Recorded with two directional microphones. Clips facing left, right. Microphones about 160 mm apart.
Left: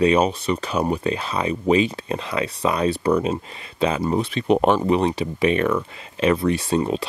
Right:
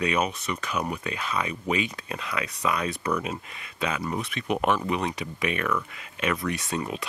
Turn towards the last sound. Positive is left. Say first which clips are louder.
# left 9 dB
turn(degrees=30)  # may be behind; listen again after turning